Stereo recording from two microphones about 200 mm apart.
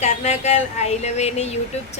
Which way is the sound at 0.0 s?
35° left (ahead or behind).